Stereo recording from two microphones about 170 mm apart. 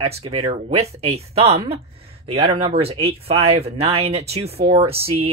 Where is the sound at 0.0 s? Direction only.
35° right (ahead or behind).